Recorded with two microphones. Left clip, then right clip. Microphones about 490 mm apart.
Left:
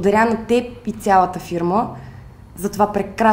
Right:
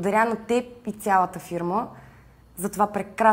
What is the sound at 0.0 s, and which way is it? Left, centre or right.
A woman's voice, right.